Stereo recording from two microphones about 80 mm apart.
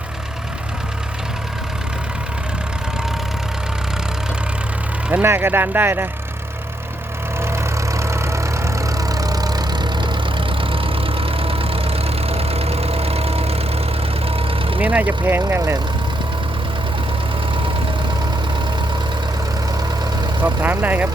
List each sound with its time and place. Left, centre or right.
5.2 s speech: right
7.4 s vehicle: right
14.8 s speech: centre
20.4 s speech: right